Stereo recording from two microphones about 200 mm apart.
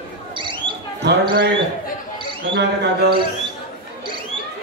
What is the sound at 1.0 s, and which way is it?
Speech, 60° right (ahead or behind).